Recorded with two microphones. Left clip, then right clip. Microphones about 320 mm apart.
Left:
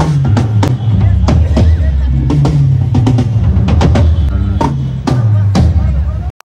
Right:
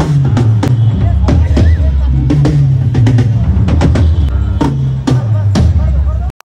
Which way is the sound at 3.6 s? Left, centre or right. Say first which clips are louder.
Left 1 dB; left.